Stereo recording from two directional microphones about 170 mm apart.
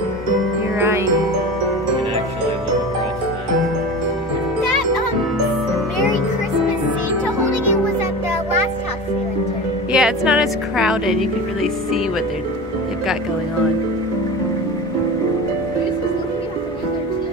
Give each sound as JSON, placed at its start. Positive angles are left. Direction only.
{"t": 0.7, "sound": "glockenspiel", "side_deg": -15}
{"t": 9.9, "sound": "speech", "side_deg": -5}